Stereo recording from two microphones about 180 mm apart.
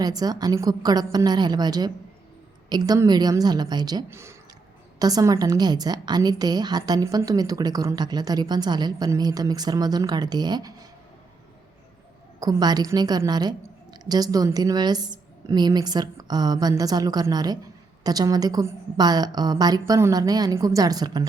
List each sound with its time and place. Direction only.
0.0 s a woman's voice: 20° right (ahead or behind)
12.4 s a woman's voice: 20° right (ahead or behind)